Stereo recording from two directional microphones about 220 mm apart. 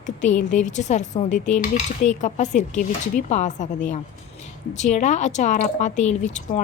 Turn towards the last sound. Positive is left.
turn(degrees=35)  # may be behind; listen again after turning